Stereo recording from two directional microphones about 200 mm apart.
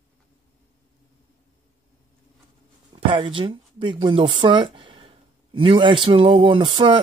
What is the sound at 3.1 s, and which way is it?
Speech, 25° right (ahead or behind).